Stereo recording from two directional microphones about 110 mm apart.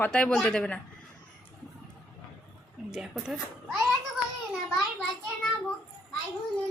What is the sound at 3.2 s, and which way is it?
Speech, 5° left (ahead or behind).